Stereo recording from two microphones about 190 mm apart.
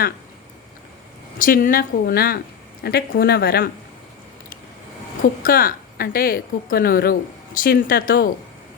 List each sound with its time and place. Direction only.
1.4 s a woman's voice: 45° left (ahead or behind)
5.4 s a woman's voice: 50° left (ahead or behind)